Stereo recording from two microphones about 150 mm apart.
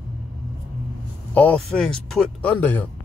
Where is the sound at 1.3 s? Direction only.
10° left (ahead or behind).